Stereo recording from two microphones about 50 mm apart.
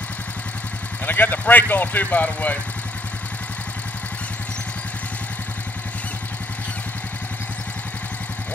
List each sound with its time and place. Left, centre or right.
1.0 s speech: left